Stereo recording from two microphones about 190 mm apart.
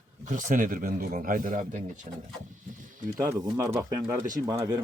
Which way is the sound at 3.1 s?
15° right (ahead or behind).